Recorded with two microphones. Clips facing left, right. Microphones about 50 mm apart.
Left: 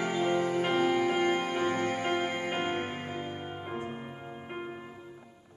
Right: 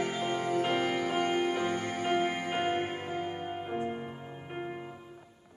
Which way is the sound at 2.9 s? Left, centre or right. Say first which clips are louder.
Right 2 dB; centre.